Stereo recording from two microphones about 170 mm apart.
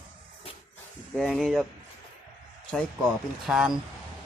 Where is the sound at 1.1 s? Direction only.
5° left (ahead or behind).